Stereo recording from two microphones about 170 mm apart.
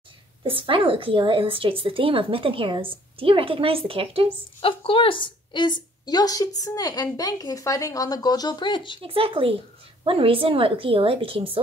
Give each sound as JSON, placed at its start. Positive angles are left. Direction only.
{"t": 0.4, "sound": "a woman's voice", "side_deg": -30}
{"t": 4.6, "sound": "a woman's voice", "side_deg": 30}
{"t": 9.0, "sound": "a woman's voice", "side_deg": -30}